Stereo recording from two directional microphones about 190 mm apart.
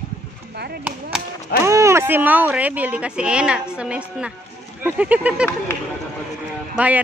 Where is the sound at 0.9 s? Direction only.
10° right (ahead or behind).